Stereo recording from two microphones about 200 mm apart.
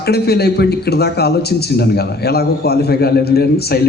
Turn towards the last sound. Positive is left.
turn(degrees=50)  # may be behind; listen again after turning